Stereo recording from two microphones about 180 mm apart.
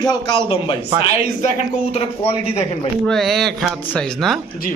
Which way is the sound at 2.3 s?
35° left (ahead or behind).